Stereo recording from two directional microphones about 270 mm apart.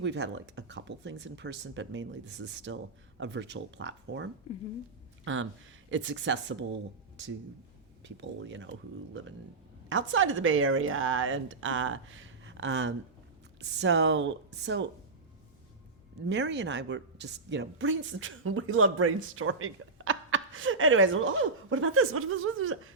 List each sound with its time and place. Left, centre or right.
0.0 s a woman's voice: right
8.0 s a woman's voice: right
9.9 s a woman's voice: right
16.2 s a woman's voice: right